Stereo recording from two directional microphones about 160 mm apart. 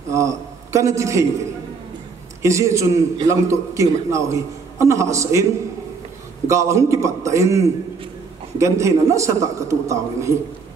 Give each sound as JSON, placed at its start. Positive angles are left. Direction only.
{"t": 0.1, "sound": "a man's voice", "side_deg": -20}
{"t": 2.4, "sound": "a man's voice", "side_deg": -20}